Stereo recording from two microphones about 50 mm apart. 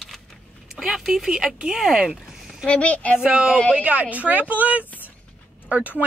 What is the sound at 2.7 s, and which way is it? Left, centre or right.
Speech, left.